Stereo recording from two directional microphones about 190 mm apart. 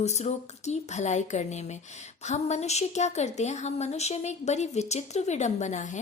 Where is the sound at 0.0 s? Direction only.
35° left (ahead or behind).